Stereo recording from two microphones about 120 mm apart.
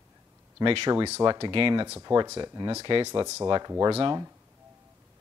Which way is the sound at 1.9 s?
30° right (ahead or behind).